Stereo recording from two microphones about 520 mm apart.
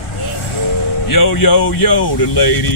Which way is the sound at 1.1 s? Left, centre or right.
Left.